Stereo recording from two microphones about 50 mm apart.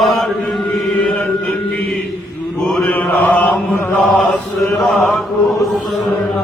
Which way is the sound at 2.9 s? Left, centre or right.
Left.